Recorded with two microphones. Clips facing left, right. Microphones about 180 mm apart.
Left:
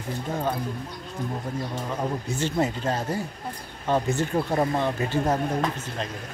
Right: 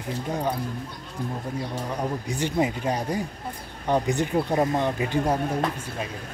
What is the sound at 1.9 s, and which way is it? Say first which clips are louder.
Speech: left 1 dB; 15° right (ahead or behind).